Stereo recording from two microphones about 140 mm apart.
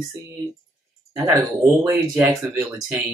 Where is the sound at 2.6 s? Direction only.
15° right (ahead or behind).